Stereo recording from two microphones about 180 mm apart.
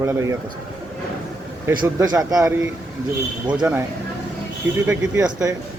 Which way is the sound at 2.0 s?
20° right (ahead or behind).